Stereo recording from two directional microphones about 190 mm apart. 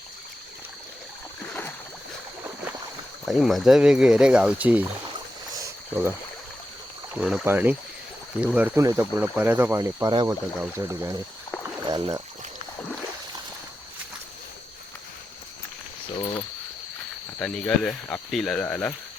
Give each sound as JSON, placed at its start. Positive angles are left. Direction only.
{"t": 3.2, "sound": "speech", "side_deg": 0}
{"t": 5.5, "sound": "a sound", "side_deg": -15}
{"t": 7.1, "sound": "speech", "side_deg": -5}
{"t": 11.9, "sound": "speech", "side_deg": -25}
{"t": 16.1, "sound": "speech", "side_deg": 25}
{"t": 17.4, "sound": "speech", "side_deg": 0}